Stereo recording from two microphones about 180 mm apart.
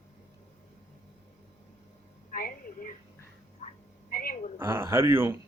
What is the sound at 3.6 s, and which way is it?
Frog, 40° left (ahead or behind).